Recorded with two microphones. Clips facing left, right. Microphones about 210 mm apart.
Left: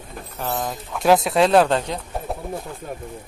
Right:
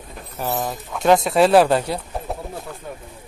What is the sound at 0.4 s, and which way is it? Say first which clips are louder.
Speech: right 2 dB; 10° right (ahead or behind).